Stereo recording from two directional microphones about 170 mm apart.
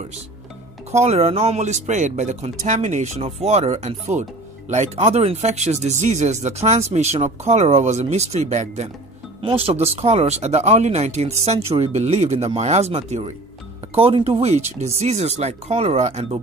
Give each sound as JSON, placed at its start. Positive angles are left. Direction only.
{"t": 0.9, "sound": "speech", "side_deg": -40}